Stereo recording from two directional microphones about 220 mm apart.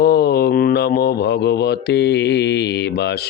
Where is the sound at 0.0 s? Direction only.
45° left (ahead or behind).